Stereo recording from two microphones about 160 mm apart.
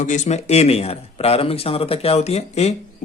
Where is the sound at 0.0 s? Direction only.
50° left (ahead or behind).